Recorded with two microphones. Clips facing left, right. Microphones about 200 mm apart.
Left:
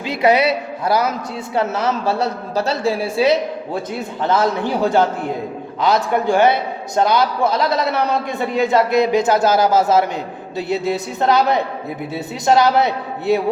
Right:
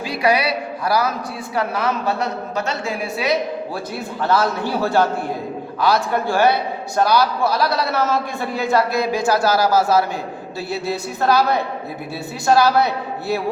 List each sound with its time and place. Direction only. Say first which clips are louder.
0.0 s a man's voice: left 4 dB; 25° left (ahead or behind)
4.2 s a man's voice: left 1 dB; 20° left (ahead or behind)